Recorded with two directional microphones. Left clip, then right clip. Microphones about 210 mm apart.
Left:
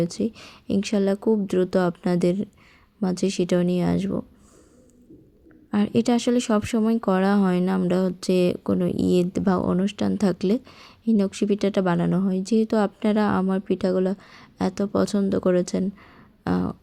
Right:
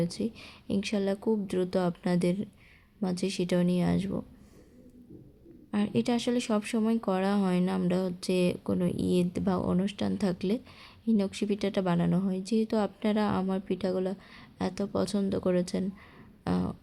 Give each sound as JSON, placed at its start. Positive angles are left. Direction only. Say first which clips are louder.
{"t": 0.0, "sound": "speech", "louder": "left 7 dB", "side_deg": 20}
{"t": 5.7, "sound": "speech", "louder": "left 7 dB", "side_deg": 25}
{"t": 16.4, "sound": "a sound", "louder": "left 6 dB", "side_deg": 20}